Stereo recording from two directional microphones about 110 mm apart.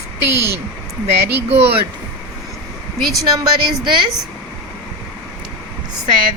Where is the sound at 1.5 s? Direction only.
65° right (ahead or behind).